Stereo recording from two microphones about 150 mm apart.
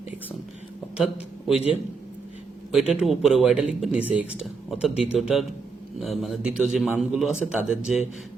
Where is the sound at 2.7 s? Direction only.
Centre (ahead or behind).